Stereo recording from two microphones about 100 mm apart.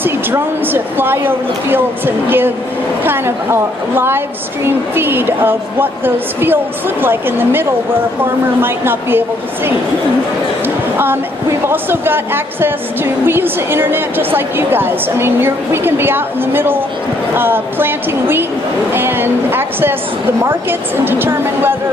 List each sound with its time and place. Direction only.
0.0 s a woman's voice: 20° right (ahead or behind)
11.7 s a woman's voice: 20° right (ahead or behind)